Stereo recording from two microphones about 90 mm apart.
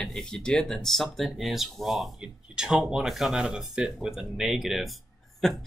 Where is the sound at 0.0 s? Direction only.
5° left (ahead or behind).